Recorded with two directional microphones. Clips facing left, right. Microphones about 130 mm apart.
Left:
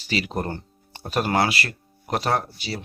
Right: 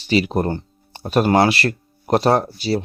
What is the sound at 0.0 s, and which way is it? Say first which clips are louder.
Speech: right 8 dB; 20° right (ahead or behind).